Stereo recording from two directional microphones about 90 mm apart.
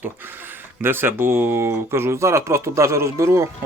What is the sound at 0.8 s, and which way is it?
Speech, 25° right (ahead or behind).